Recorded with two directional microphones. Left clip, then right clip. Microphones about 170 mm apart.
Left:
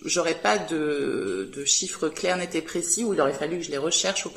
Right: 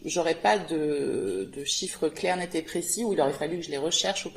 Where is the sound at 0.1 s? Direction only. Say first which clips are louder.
Left 1 dB; 30° right (ahead or behind).